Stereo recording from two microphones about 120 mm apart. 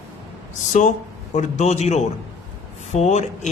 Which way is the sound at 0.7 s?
90° left.